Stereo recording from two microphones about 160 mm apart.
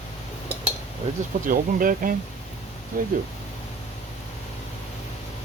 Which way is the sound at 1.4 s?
60° right (ahead or behind).